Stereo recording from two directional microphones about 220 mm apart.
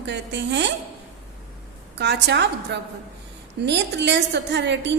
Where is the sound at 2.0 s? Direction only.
50° right (ahead or behind).